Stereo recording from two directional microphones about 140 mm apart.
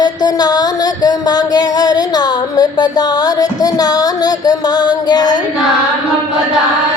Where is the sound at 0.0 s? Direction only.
30° left (ahead or behind).